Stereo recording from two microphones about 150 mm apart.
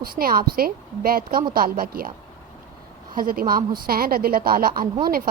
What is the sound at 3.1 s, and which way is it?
A woman's voice, 75° right (ahead or behind).